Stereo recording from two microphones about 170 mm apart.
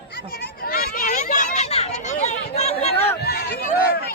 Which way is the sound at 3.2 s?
70° left (ahead or behind).